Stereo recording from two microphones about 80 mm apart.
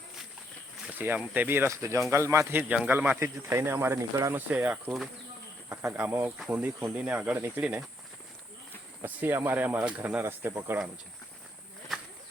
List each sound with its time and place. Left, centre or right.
0.9 s speech: right
1.7 s speech: right
2.5 s speech: centre
3.2 s speech: right
4.4 s speech: centre
5.6 s cricket: right
6.1 s speech: right
9.0 s speech: right
11.9 s a sound: centre